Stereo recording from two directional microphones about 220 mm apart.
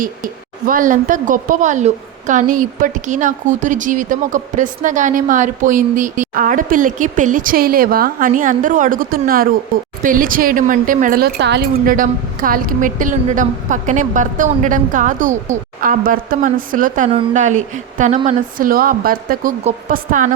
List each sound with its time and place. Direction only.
0.0 s a woman's voice: 40° right (ahead or behind)